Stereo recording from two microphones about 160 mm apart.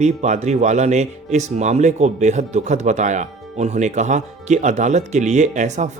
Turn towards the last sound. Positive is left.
turn(degrees=-50)  # may be behind; listen again after turning